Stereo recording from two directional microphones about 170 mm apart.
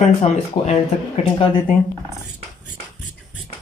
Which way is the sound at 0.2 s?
40° left (ahead or behind).